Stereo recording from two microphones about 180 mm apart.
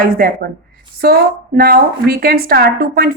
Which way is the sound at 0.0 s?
55° right (ahead or behind).